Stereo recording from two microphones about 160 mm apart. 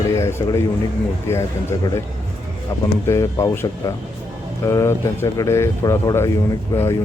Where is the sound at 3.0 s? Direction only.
15° left (ahead or behind).